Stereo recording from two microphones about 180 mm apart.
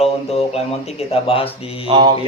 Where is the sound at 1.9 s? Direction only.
30° right (ahead or behind).